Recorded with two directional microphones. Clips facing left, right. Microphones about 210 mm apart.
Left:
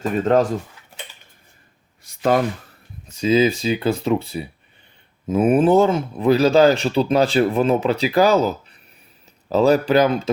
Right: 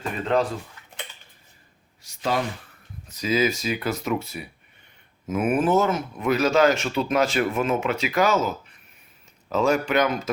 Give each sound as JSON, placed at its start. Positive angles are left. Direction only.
{"t": 0.0, "sound": "speech", "side_deg": 45}
{"t": 2.0, "sound": "a sound", "side_deg": 55}
{"t": 3.1, "sound": "speech", "side_deg": 30}